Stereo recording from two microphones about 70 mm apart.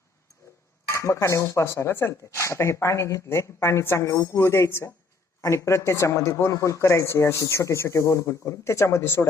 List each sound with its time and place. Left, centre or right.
0.9 s cutlery: left
1.6 s speech: left